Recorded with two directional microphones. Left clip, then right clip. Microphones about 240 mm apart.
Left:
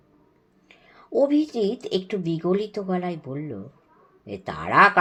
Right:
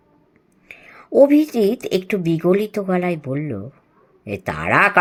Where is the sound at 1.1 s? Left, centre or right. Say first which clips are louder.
Right 8 dB; right.